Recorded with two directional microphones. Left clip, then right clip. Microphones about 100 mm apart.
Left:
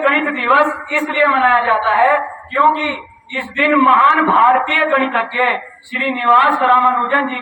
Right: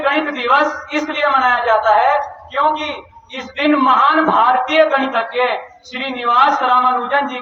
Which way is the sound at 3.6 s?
50° right (ahead or behind).